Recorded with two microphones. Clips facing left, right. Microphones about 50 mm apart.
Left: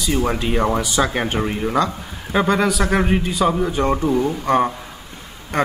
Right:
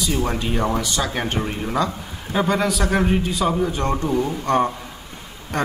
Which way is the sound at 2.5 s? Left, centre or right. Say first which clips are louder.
Left 2 dB; centre.